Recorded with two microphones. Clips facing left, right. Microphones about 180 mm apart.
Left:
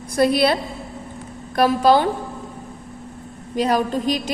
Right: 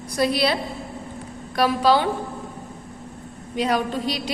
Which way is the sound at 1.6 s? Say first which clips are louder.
Left 3 dB; 45° left (ahead or behind).